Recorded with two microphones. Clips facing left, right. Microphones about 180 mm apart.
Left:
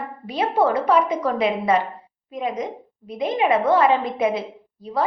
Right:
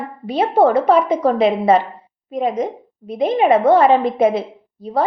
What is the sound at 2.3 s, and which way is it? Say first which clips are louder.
A woman's voice: right 6 dB; 45° right (ahead or behind).